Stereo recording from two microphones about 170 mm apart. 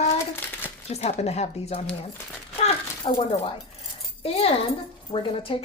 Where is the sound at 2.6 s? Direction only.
40° left (ahead or behind).